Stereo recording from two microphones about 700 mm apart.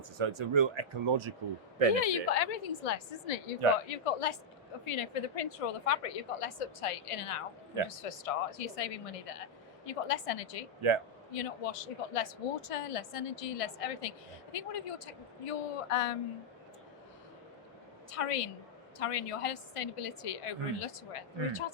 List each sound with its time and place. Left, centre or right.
0.3 s speech: right
2.0 s a woman's voice: left
4.0 s a woman's voice: left
10.8 s speech: right
11.3 s a woman's voice: left
18.1 s a woman's voice: left